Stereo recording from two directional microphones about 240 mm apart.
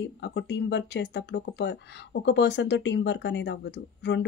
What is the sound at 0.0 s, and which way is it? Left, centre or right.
Speech, left.